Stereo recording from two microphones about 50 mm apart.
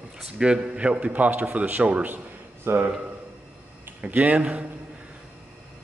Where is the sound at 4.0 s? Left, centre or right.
Right.